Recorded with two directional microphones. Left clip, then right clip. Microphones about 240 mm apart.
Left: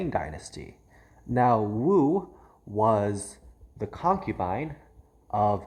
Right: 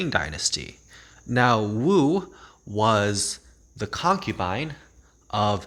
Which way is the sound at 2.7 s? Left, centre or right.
Right.